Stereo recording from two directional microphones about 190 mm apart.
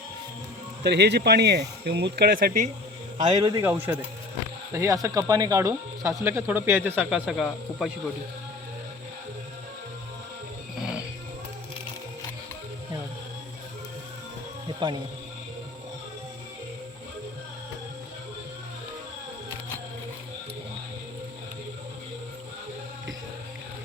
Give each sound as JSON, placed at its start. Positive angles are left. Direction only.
{"t": 0.9, "sound": "speech", "side_deg": -60}
{"t": 3.2, "sound": "speech", "side_deg": -20}
{"t": 14.8, "sound": "speech", "side_deg": -25}